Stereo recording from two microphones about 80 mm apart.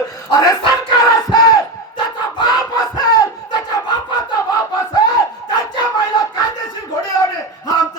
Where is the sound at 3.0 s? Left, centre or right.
Left.